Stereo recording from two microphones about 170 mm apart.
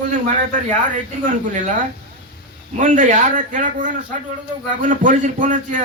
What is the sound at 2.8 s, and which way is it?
A man's voice, 50° right (ahead or behind).